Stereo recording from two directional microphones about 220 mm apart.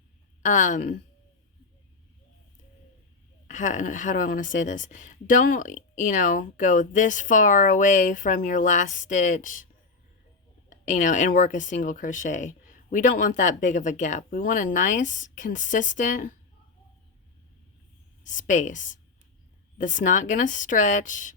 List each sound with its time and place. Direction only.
0.4 s speech: 35° left (ahead or behind)
3.4 s speech: 35° left (ahead or behind)
10.7 s speech: 35° left (ahead or behind)
18.2 s speech: 35° left (ahead or behind)